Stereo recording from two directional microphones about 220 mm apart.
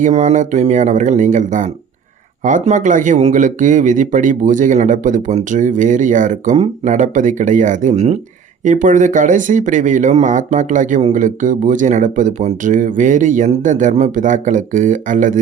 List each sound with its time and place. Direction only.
0.0 s speech: 30° right (ahead or behind)